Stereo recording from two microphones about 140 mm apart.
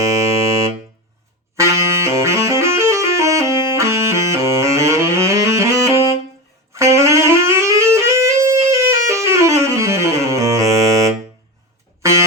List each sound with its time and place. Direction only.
1.5 s music: 20° right (ahead or behind)
6.7 s saxophone: 20° right (ahead or behind)
7.9 s music: 20° right (ahead or behind)